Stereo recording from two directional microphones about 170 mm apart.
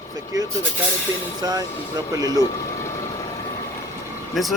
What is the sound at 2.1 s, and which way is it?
Speech, 20° right (ahead or behind).